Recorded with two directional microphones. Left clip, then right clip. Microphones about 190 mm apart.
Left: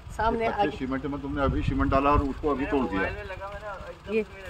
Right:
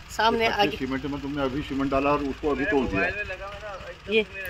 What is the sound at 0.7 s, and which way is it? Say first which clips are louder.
Speech: right 2 dB; 15° right (ahead or behind).